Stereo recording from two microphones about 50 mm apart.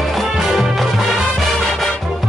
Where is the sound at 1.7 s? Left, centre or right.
Centre.